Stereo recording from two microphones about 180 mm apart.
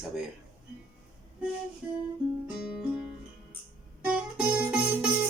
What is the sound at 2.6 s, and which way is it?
Speech, 5° right (ahead or behind).